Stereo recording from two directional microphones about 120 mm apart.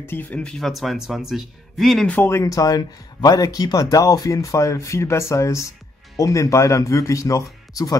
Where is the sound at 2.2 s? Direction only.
20° left (ahead or behind).